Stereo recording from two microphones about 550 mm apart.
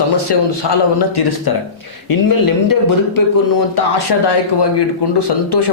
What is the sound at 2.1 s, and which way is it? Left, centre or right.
Speech, left.